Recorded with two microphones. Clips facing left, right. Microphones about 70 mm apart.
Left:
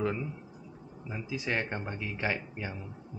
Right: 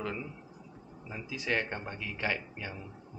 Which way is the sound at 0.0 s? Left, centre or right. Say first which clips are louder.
Left 5 dB; centre.